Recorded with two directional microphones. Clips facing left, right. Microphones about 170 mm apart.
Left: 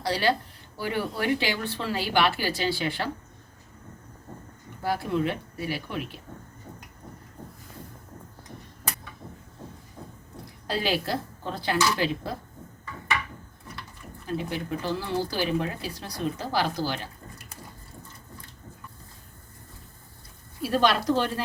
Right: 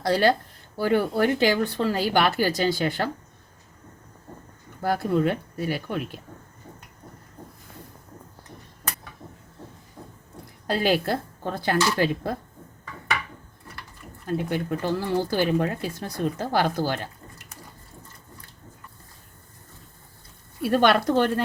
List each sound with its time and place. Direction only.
0.0 s speech: 50° right (ahead or behind)
4.8 s speech: 45° right (ahead or behind)
10.7 s speech: 50° right (ahead or behind)
14.3 s speech: 55° right (ahead or behind)
20.6 s speech: 60° right (ahead or behind)